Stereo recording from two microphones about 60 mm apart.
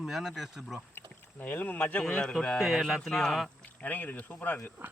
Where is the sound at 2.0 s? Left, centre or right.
Centre.